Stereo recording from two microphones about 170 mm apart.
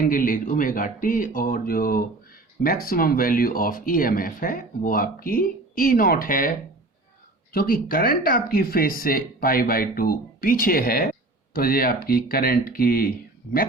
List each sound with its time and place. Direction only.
0.0 s speech: 55° left (ahead or behind)
7.5 s speech: 60° left (ahead or behind)